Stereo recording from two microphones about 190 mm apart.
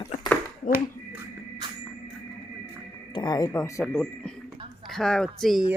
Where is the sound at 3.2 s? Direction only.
20° left (ahead or behind).